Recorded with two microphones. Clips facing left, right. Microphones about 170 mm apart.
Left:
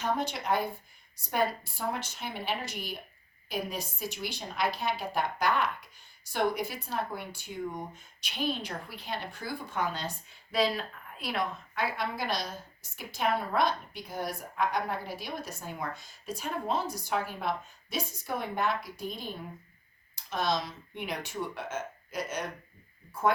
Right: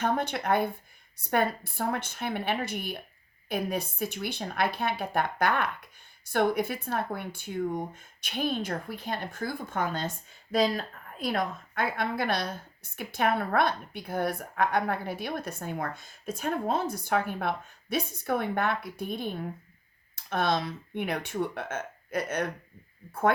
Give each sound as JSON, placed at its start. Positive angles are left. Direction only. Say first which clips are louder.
{"t": 0.0, "sound": "a woman's voice", "louder": "right 3 dB", "side_deg": -55}